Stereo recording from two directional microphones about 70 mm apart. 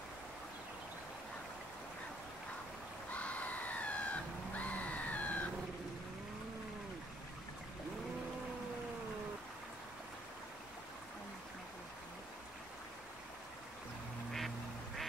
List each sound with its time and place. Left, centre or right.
3.1 s crowd: left